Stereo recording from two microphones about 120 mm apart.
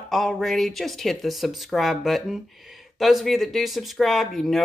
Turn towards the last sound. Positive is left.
turn(degrees=0)  # may be behind; listen again after turning